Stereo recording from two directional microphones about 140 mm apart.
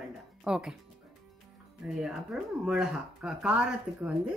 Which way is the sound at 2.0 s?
5° right (ahead or behind).